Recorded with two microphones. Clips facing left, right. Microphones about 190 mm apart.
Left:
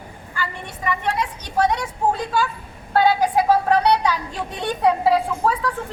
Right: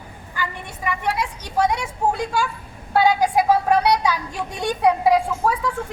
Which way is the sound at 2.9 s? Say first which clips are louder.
Even; 10° right (ahead or behind).